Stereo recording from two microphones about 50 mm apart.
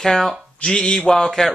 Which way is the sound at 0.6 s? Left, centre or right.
Centre.